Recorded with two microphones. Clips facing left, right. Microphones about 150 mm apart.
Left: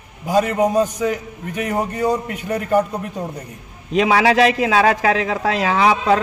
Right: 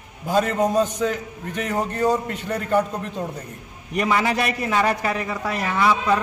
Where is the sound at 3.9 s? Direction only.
90° left.